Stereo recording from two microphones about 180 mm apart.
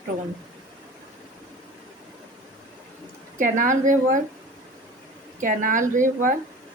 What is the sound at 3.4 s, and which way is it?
Speech, 45° right (ahead or behind).